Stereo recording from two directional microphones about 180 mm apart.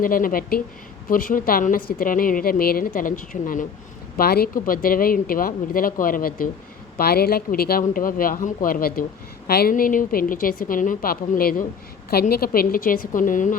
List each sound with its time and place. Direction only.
0.0 s a woman's voice: 50° left (ahead or behind)